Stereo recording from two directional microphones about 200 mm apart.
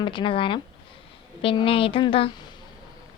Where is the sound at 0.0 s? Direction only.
25° left (ahead or behind).